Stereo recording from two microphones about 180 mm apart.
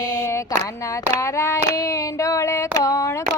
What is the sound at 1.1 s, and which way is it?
Child singing, 15° left (ahead or behind).